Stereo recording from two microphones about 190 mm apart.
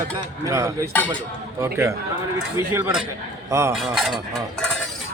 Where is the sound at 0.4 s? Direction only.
15° right (ahead or behind).